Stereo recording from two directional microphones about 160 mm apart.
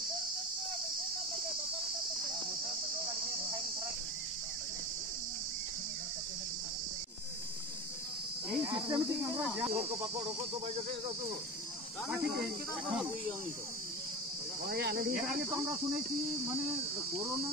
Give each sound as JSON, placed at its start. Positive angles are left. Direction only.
{"t": 8.6, "sound": "cricket", "side_deg": -30}
{"t": 14.7, "sound": "speech", "side_deg": -85}